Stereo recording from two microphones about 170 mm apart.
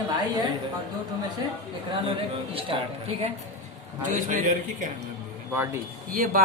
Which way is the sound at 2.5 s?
30° right (ahead or behind).